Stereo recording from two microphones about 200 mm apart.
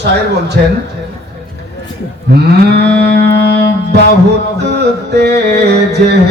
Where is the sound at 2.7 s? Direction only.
55° right (ahead or behind).